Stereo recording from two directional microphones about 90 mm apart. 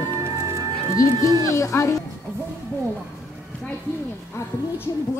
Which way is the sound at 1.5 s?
35° left (ahead or behind).